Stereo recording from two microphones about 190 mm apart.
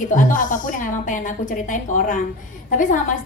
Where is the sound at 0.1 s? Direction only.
45° left (ahead or behind).